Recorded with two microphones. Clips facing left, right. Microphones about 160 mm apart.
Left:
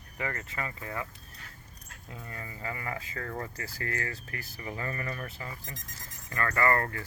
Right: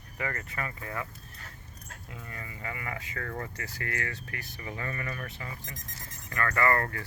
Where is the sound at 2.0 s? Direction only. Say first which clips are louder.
Left 1 dB; 30° left (ahead or behind).